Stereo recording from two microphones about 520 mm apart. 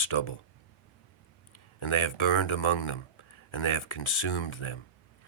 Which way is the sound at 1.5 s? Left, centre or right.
Left.